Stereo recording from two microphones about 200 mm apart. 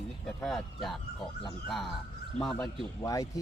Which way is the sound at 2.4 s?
Centre (ahead or behind).